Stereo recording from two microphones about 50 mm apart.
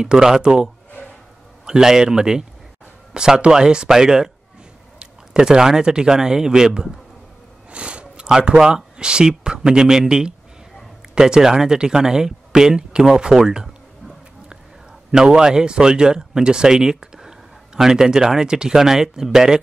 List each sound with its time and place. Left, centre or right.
0.0 s speech: centre
1.0 s a sound: left
1.7 s speech: centre
5.3 s speech: centre
13.5 s a sound: centre
15.0 s speech: centre